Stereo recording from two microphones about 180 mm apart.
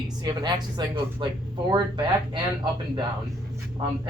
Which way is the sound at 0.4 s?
25° right (ahead or behind).